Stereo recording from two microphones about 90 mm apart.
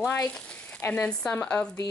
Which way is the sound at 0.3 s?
15° left (ahead or behind).